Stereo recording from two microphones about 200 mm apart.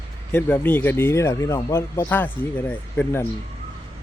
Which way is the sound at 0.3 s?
10° left (ahead or behind).